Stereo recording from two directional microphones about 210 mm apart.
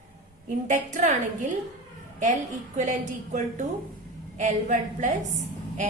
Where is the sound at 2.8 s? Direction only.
35° right (ahead or behind).